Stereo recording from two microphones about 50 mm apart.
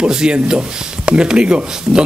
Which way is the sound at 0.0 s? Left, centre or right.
Centre.